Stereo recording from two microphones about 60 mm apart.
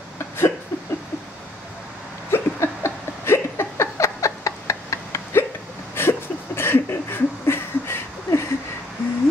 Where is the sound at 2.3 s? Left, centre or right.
Left.